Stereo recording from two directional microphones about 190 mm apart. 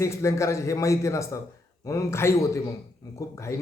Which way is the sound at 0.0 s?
15° left (ahead or behind).